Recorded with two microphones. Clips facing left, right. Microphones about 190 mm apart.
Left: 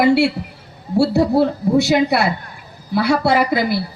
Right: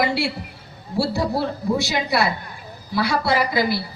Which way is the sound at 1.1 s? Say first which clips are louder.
Left 8 dB; 60° left (ahead or behind).